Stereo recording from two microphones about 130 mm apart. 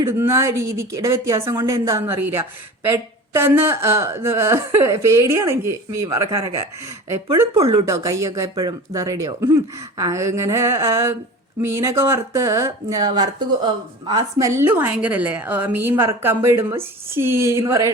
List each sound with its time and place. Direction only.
0.0 s a woman's voice: 20° right (ahead or behind)